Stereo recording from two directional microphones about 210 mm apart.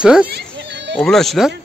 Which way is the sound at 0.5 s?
55° right (ahead or behind).